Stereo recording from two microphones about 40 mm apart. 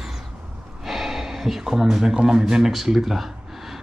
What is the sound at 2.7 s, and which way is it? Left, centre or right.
Speech, centre.